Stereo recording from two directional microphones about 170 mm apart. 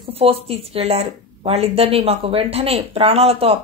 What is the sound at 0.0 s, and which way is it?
A woman's voice, 35° right (ahead or behind).